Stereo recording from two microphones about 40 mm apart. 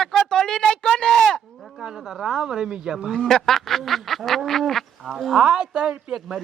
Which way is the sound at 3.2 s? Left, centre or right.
Centre.